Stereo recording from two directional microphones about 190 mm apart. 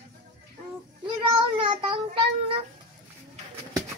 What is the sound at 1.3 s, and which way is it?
Child singing, 25° right (ahead or behind).